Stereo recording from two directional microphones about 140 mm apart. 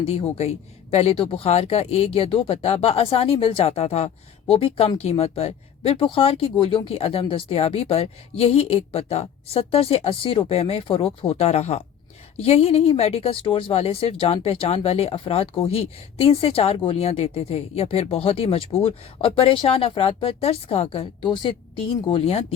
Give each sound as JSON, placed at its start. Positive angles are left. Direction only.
{"t": 0.0, "sound": "speech", "side_deg": 45}